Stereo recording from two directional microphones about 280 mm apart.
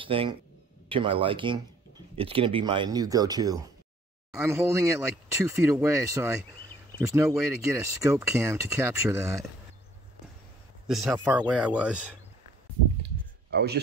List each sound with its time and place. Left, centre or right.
0.0 s speech: centre
10.9 s speech: centre
13.5 s a man's voice: right